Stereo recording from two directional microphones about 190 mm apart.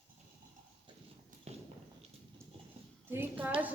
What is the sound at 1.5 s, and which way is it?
Walk, 35° right (ahead or behind).